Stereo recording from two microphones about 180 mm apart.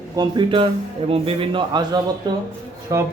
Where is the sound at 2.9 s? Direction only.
15° right (ahead or behind).